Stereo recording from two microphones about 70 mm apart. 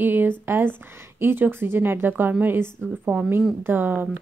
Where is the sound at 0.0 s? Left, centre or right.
Right.